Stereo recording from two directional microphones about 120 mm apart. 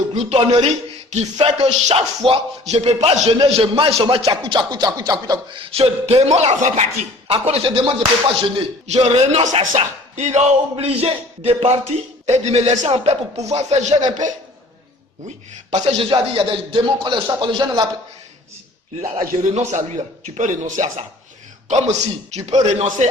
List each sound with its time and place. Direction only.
0.1 s speech: 65° right (ahead or behind)
4.3 s speech: 40° right (ahead or behind)
5.5 s speech: 45° right (ahead or behind); by 6.8 s 80° right
7.3 s speech: 55° right (ahead or behind)
8.9 s speech: 65° right (ahead or behind); by 12.9 s 80° right
13.1 s speech: 65° right (ahead or behind)
14.2 s a man's voice: 90° right
15.7 s speech: 70° right (ahead or behind)
16.3 s speech: 45° right (ahead or behind)
19.1 s a man's voice: 70° right (ahead or behind); by 21.0 s 90° right
21.7 s speech: 70° right (ahead or behind)